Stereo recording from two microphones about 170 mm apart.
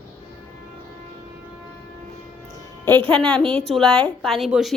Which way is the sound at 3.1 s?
5° left (ahead or behind).